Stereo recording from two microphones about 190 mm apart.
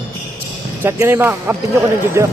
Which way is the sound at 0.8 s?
15° right (ahead or behind).